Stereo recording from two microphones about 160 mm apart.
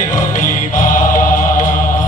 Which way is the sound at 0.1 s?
55° left (ahead or behind).